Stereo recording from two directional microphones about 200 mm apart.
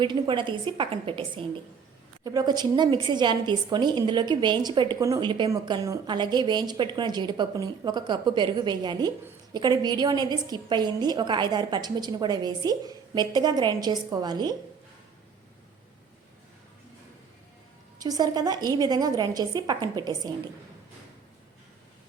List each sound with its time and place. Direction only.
0.0 s a woman's voice: 25° right (ahead or behind)
18.0 s a woman's voice: 20° right (ahead or behind)